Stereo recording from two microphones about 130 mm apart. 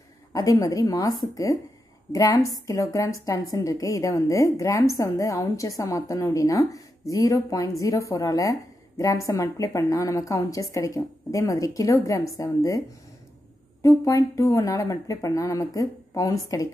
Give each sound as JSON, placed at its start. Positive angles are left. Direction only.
{"t": 0.3, "sound": "a woman's voice", "side_deg": 25}
{"t": 13.8, "sound": "a woman's voice", "side_deg": 25}